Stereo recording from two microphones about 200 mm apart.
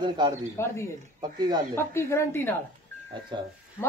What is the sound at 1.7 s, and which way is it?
Speech, 10° left (ahead or behind).